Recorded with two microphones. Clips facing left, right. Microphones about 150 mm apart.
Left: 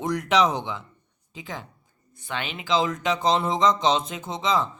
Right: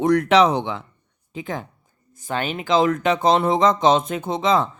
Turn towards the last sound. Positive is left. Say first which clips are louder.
# right 5 dB
turn(degrees=-60)  # may be behind; listen again after turning